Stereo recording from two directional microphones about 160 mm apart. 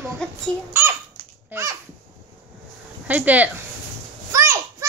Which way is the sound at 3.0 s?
10° right (ahead or behind).